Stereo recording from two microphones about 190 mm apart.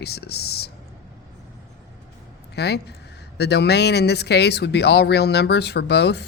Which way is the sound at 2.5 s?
60° left (ahead or behind).